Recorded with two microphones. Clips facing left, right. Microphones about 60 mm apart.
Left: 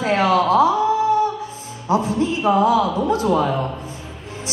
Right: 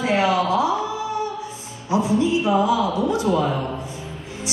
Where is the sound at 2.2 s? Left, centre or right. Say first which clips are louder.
Left 3 dB; left.